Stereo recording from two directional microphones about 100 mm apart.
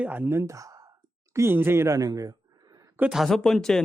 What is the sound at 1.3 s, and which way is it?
Speech, 25° right (ahead or behind).